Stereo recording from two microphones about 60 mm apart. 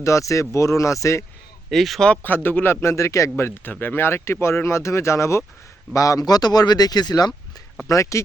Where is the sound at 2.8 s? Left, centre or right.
Left.